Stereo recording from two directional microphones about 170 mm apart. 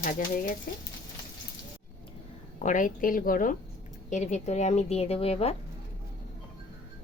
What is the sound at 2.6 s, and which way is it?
Speech, 50° left (ahead or behind).